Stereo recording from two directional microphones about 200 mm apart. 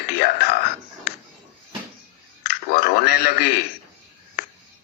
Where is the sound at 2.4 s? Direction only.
50° left (ahead or behind).